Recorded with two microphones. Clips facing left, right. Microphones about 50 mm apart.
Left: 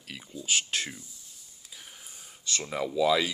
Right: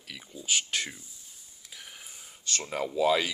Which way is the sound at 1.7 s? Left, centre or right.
Right.